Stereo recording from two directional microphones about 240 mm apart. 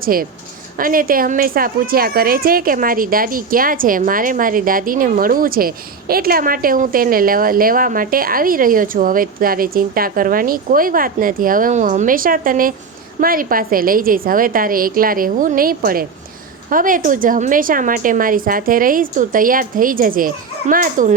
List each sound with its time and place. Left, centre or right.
0.0 s a woman's voice: right